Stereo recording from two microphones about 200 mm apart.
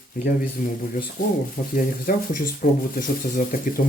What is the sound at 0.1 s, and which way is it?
Speech, 45° left (ahead or behind).